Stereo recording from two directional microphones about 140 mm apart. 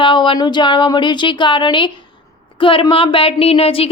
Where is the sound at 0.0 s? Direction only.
35° left (ahead or behind).